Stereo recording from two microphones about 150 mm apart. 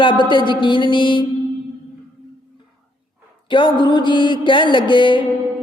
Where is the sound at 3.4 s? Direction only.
35° left (ahead or behind).